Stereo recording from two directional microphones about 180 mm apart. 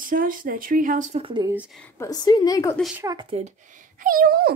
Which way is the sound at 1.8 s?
20° left (ahead or behind).